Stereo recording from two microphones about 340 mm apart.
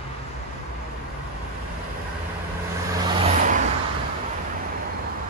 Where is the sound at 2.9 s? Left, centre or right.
Centre.